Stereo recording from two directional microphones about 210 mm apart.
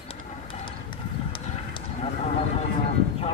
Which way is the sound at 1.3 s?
30° left (ahead or behind).